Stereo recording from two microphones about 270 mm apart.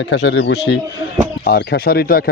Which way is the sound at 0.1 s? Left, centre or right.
Left.